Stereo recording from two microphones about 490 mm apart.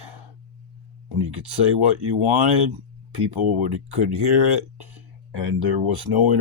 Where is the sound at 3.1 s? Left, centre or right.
Right.